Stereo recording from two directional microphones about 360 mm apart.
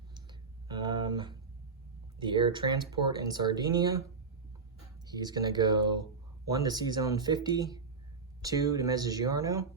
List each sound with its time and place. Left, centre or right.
0.1 s clicking: centre
2.1 s speech: centre
5.0 s speech: centre